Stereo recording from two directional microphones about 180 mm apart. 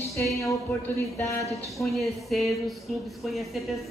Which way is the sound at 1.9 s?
Centre (ahead or behind).